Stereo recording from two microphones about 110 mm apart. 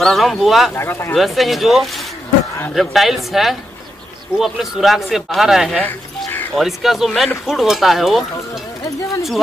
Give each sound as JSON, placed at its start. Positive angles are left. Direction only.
{"t": 0.0, "sound": "speech", "side_deg": 0}
{"t": 0.7, "sound": "speech", "side_deg": 25}
{"t": 1.1, "sound": "speech", "side_deg": 0}